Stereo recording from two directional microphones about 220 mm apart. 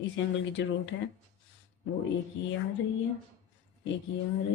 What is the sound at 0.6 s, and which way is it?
Speech, 55° left (ahead or behind).